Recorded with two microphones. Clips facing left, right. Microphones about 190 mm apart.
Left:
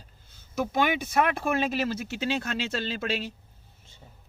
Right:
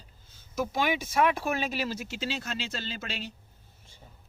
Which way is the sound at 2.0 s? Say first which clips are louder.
Left 5 dB; 60° left (ahead or behind).